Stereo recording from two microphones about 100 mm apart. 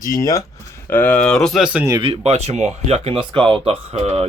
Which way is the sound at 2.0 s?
80° right.